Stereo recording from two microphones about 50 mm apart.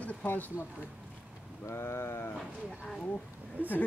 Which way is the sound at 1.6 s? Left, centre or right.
Left.